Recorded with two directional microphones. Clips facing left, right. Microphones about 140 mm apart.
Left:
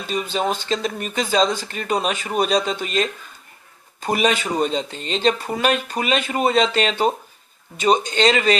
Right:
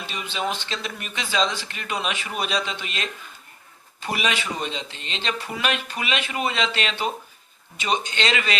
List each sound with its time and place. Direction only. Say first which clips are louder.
0.0 s speech: left 6 dB; 45° left (ahead or behind)